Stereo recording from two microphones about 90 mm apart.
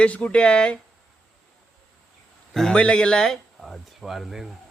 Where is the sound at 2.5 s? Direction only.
5° left (ahead or behind).